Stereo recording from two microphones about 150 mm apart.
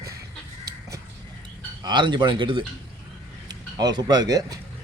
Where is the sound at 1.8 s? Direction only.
30° right (ahead or behind).